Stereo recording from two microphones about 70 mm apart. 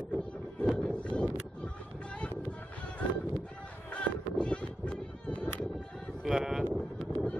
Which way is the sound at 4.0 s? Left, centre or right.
Centre.